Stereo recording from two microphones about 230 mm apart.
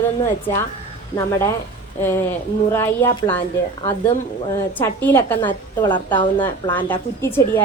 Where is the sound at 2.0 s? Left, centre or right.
Centre.